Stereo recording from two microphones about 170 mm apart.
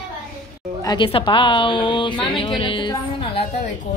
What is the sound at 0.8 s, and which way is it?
A woman's voice, 25° left (ahead or behind).